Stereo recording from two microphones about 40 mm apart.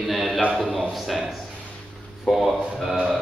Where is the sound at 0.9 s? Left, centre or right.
Centre.